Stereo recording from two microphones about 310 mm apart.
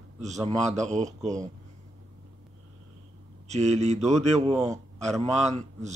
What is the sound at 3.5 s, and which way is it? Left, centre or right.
A man's voice, right.